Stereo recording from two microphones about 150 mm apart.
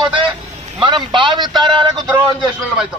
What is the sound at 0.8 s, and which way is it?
A man's voice, 30° right (ahead or behind).